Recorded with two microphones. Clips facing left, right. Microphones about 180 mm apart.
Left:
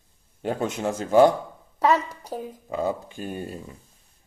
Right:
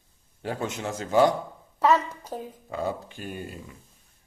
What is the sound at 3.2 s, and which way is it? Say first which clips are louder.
Speech: left 4 dB; 30° left (ahead or behind).